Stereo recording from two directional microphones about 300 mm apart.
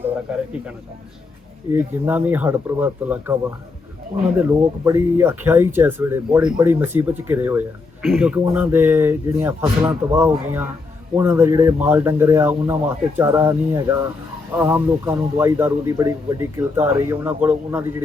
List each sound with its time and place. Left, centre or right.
1.7 s a man's voice: centre
4.4 s a man's voice: centre